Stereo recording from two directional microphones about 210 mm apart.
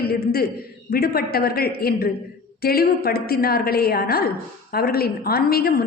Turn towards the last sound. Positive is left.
turn(degrees=45)  # may be behind; listen again after turning